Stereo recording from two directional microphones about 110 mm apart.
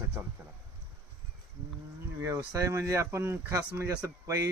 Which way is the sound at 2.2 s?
30° right (ahead or behind).